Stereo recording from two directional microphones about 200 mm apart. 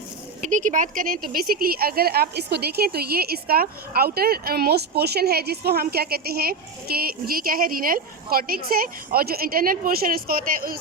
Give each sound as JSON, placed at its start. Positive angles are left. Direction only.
{"t": 0.4, "sound": "speech", "side_deg": -40}